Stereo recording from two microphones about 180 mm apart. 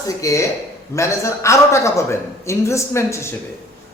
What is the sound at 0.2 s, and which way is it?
A man's voice, 15° left (ahead or behind).